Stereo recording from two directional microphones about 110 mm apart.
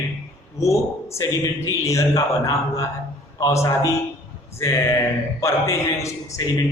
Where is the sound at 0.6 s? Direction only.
25° left (ahead or behind).